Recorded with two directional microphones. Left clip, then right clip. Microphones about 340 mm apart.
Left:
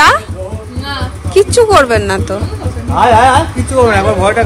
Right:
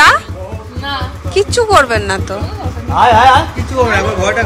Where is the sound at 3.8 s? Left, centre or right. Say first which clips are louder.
Left 4 dB; centre.